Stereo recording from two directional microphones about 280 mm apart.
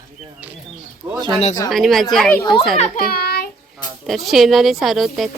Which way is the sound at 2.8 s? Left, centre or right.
Left.